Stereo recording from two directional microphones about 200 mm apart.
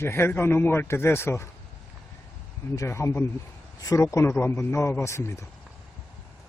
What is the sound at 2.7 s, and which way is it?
Speech, 15° left (ahead or behind).